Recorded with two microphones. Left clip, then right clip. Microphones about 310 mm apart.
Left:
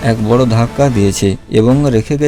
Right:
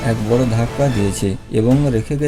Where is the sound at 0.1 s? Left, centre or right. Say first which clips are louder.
Left 5 dB; left.